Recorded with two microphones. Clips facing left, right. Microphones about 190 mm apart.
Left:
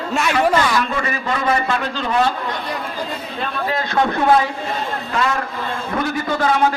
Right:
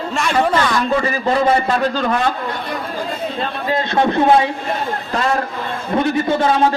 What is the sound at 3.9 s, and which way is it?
Speech, 25° right (ahead or behind).